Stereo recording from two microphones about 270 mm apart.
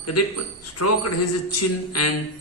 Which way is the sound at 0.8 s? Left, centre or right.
Left.